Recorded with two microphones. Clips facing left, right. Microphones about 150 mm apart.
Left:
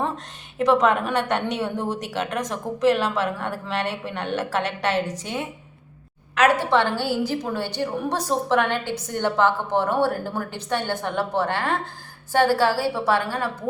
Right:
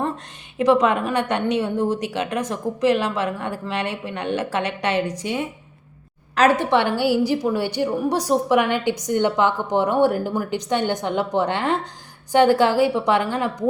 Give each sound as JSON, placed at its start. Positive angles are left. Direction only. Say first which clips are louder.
{"t": 0.6, "sound": "a woman's voice", "louder": "right 2 dB", "side_deg": -10}
{"t": 6.3, "sound": "a woman's voice", "louder": "right 2 dB", "side_deg": -30}
{"t": 6.6, "sound": "a woman's voice", "louder": "right 2 dB", "side_deg": -15}